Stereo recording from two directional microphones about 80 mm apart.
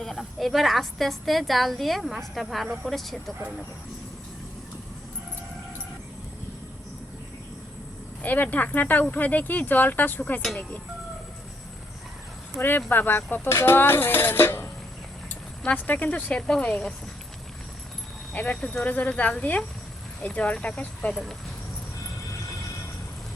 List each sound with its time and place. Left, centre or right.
0.0 s a woman's voice: centre
8.2 s speech: left
12.5 s speech: left
15.6 s speech: centre
18.3 s speech: centre
21.1 s a woman's voice: centre